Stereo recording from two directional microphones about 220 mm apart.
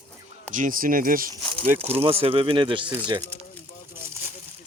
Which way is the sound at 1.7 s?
30° right (ahead or behind).